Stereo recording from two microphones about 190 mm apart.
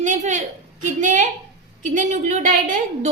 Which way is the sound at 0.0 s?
40° right (ahead or behind).